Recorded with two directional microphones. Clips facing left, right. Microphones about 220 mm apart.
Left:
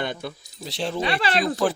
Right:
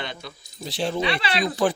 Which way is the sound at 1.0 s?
45° left (ahead or behind).